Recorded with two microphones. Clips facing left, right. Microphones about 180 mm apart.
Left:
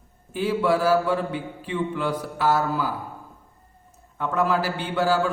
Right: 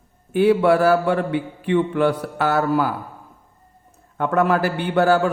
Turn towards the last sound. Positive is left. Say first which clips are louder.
# right 5 dB
turn(degrees=-60)  # may be behind; listen again after turning